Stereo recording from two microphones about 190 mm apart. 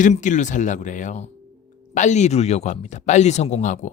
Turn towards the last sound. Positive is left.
turn(degrees=40)  # may be behind; listen again after turning